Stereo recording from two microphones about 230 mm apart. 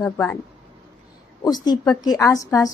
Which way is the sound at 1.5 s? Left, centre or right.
Centre.